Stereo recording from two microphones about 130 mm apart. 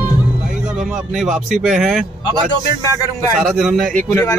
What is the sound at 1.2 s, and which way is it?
Speech, 5° right (ahead or behind).